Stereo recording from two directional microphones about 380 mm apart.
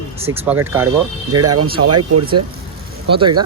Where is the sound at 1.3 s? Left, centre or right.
Right.